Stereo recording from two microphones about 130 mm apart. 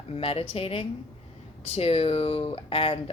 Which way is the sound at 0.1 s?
50° left (ahead or behind).